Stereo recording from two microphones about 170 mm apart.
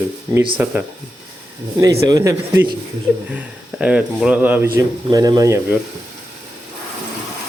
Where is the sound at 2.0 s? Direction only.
20° right (ahead or behind).